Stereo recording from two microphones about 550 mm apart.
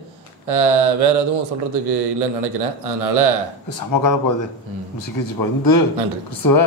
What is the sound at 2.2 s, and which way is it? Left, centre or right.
A man's voice, right.